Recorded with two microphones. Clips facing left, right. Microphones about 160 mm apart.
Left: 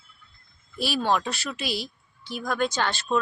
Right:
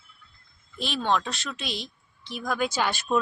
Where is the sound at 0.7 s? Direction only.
5° left (ahead or behind).